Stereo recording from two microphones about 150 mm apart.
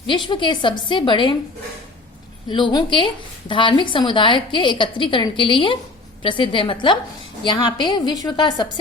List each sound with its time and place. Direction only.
0.3 s a woman's voice: 30° left (ahead or behind)
2.5 s a woman's voice: 30° left (ahead or behind)